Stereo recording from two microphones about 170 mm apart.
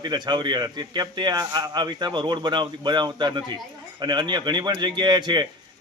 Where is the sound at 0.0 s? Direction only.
25° right (ahead or behind).